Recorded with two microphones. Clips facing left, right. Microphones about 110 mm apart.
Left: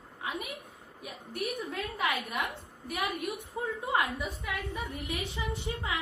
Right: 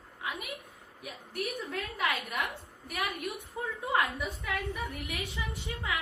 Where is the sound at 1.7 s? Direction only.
25° left (ahead or behind).